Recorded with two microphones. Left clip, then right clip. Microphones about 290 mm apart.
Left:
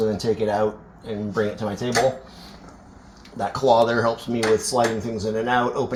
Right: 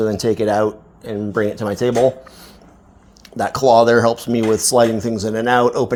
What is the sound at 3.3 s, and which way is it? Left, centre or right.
Speech, right.